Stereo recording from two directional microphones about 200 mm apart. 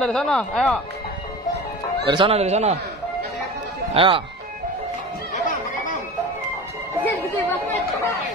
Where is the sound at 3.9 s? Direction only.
25° right (ahead or behind).